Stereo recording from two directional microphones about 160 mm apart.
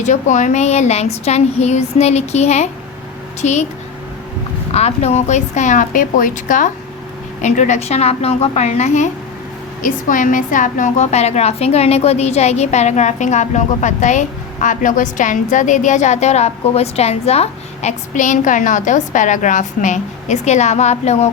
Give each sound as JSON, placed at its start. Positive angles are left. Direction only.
{"t": 0.0, "sound": "a woman's voice", "side_deg": 50}
{"t": 4.7, "sound": "a woman's voice", "side_deg": 40}
{"t": 9.8, "sound": "a woman's voice", "side_deg": 55}